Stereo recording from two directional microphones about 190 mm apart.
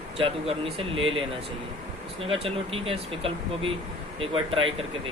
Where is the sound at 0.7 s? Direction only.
30° right (ahead or behind).